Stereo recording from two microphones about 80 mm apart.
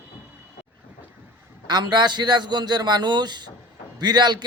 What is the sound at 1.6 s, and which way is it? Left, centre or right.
A man's voice, right.